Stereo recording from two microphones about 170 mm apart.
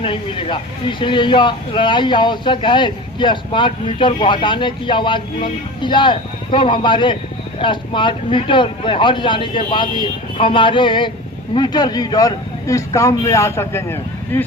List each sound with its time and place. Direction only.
0.0 s speech: 30° left (ahead or behind); by 14.4 s 15° left (ahead or behind)